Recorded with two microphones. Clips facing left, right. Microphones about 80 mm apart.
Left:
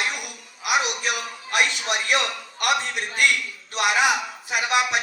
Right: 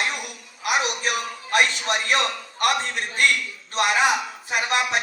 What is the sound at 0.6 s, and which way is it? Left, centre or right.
A man's voice, right.